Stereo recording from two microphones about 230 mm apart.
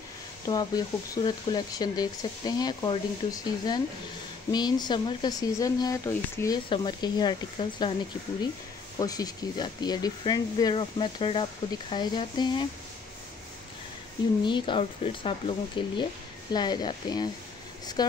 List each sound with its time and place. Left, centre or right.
0.5 s speech: centre
9.0 s speech: centre
14.4 s speech: left